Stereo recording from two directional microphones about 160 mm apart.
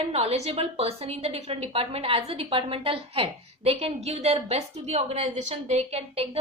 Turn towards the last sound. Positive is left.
turn(degrees=-40)  # may be behind; listen again after turning